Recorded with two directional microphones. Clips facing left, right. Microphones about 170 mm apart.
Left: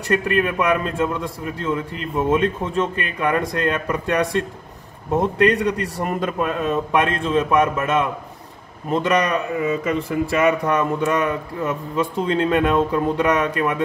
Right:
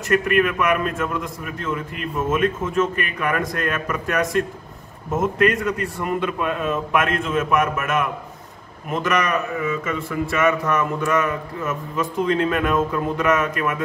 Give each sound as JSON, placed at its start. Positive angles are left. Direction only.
{"t": 0.1, "sound": "a man's voice", "side_deg": 30}